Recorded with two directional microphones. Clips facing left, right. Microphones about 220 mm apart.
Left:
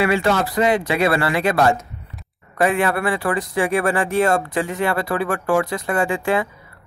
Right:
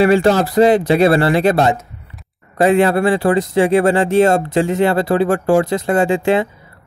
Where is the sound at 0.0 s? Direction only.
35° right (ahead or behind).